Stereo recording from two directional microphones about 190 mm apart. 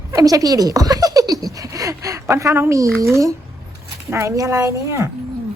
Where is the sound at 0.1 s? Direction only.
20° right (ahead or behind).